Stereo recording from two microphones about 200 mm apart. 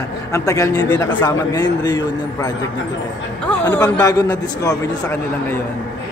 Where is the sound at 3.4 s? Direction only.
10° left (ahead or behind).